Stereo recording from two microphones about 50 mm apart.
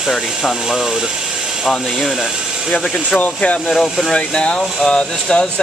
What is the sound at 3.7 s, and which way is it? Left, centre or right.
Speech, centre.